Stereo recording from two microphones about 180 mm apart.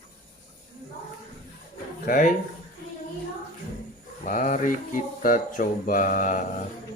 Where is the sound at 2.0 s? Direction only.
45° left (ahead or behind).